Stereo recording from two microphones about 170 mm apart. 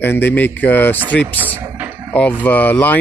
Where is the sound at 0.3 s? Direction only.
10° left (ahead or behind).